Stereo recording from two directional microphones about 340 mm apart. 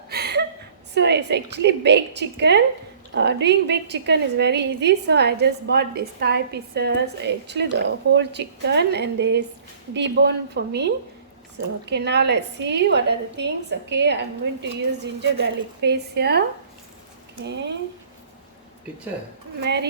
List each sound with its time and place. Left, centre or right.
0.1 s chuckle: right
0.9 s a woman's voice: right
19.6 s a woman's voice: right